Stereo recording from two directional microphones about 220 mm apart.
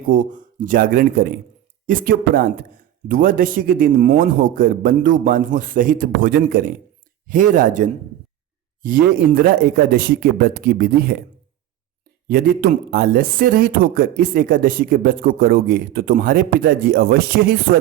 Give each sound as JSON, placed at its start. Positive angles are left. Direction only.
{"t": 0.1, "sound": "speech", "side_deg": -35}
{"t": 12.3, "sound": "speech", "side_deg": -40}